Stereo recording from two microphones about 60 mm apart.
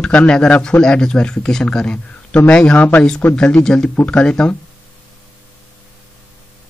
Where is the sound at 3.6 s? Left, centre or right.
Centre.